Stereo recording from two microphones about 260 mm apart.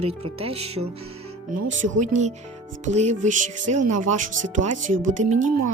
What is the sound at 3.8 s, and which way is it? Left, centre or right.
Speech, right.